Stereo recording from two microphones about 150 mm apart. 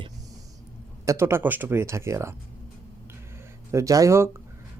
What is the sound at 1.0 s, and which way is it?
Speech, 15° right (ahead or behind).